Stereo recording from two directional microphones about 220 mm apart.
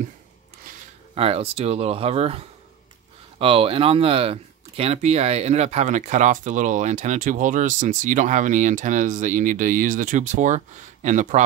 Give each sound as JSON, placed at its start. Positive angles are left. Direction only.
{"t": 1.1, "sound": "speech", "side_deg": -25}